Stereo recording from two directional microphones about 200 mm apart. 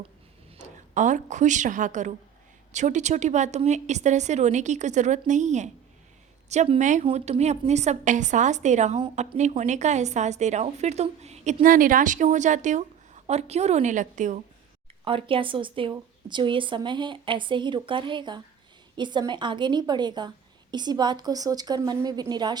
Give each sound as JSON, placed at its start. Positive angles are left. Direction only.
{"t": 0.5, "sound": "a woman's voice", "side_deg": -35}
{"t": 9.0, "sound": "speech", "side_deg": -25}
{"t": 15.0, "sound": "a woman's voice", "side_deg": -25}